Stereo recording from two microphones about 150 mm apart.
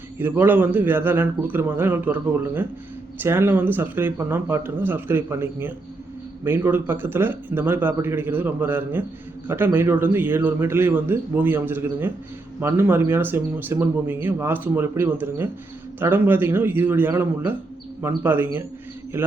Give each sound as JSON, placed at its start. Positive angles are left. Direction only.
{"t": 0.2, "sound": "a man's voice", "side_deg": -15}